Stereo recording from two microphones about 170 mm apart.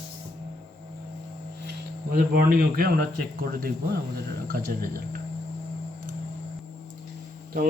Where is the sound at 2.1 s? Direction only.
60° right (ahead or behind).